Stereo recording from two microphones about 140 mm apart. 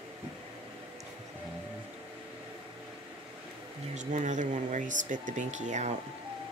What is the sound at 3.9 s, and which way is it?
Speech, 60° right (ahead or behind).